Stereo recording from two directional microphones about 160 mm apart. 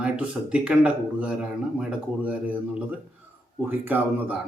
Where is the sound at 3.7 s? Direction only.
10° right (ahead or behind).